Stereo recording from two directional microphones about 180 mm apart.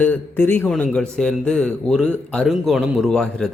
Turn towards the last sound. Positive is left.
turn(degrees=5)  # may be behind; listen again after turning